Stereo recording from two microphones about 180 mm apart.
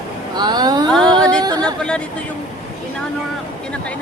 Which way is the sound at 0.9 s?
5° left (ahead or behind).